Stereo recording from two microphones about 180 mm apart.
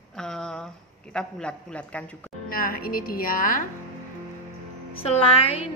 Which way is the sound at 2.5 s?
55° left (ahead or behind).